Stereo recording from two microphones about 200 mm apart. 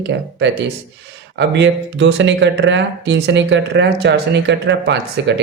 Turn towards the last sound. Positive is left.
turn(degrees=-60)  # may be behind; listen again after turning